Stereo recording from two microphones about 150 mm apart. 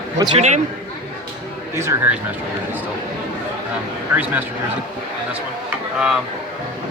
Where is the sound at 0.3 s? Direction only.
50° right (ahead or behind).